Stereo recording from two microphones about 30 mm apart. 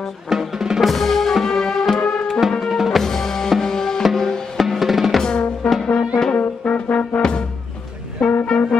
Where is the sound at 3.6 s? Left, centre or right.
Centre.